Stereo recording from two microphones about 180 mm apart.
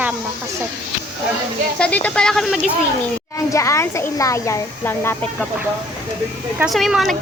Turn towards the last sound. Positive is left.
turn(degrees=0)  # may be behind; listen again after turning